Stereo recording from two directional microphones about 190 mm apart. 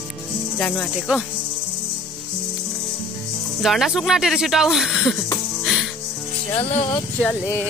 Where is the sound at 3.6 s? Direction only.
Centre (ahead or behind).